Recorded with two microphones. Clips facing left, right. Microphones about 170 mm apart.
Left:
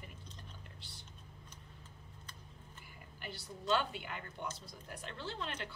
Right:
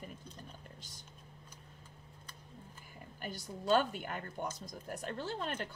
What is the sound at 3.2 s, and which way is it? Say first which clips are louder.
A woman's voice: right 4 dB; 45° right (ahead or behind).